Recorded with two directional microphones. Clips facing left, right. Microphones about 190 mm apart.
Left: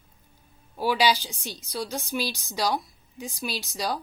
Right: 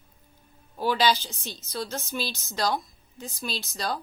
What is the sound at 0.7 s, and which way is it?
A woman's voice, 10° left (ahead or behind).